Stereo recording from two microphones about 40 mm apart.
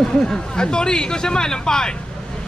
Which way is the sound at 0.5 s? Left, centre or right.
Centre.